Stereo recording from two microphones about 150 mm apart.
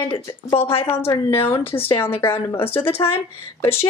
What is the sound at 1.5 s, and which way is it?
Speech, 15° left (ahead or behind).